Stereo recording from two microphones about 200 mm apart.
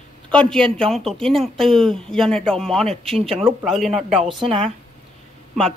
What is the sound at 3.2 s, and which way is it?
Speech, 30° right (ahead or behind).